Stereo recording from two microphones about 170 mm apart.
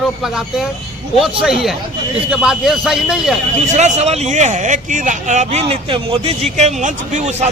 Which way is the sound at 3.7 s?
40° right (ahead or behind).